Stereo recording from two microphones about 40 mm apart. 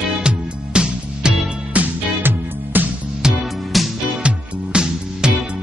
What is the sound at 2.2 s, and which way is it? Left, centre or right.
Music, right.